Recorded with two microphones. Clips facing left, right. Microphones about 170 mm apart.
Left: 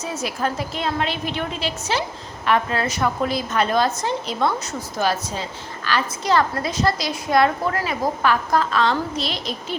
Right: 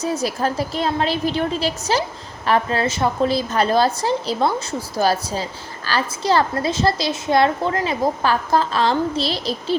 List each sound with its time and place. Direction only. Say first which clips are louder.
0.0 s a woman's voice: right 4 dB; 35° right (ahead or behind)